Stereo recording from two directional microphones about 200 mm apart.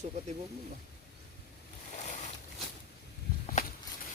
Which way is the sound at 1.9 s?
35° left (ahead or behind).